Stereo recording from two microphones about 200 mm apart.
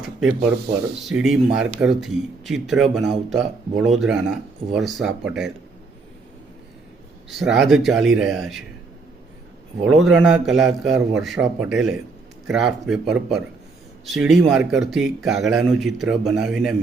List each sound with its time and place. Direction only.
1.0 s speech: centre (ahead or behind)
7.3 s speech: centre (ahead or behind)
9.8 s speech: centre (ahead or behind)